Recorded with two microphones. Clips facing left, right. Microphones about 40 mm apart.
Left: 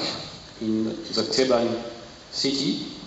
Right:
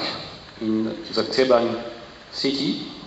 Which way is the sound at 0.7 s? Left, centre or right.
Right.